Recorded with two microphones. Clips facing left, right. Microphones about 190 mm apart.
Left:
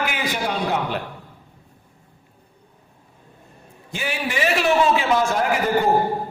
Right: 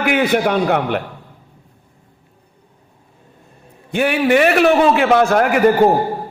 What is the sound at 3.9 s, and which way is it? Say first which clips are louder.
A man's voice: right 12 dB; 60° right (ahead or behind).